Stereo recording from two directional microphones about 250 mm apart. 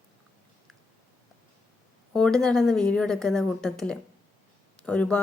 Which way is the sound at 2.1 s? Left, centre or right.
Centre.